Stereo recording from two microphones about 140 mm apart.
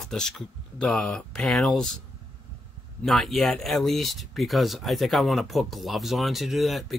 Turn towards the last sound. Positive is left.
turn(degrees=0)  # may be behind; listen again after turning